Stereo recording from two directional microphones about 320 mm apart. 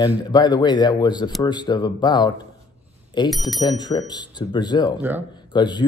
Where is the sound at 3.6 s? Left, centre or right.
Centre.